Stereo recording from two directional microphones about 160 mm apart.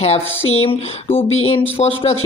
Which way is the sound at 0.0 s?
40° left (ahead or behind).